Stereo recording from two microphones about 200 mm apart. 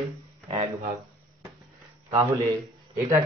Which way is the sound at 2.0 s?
15° right (ahead or behind).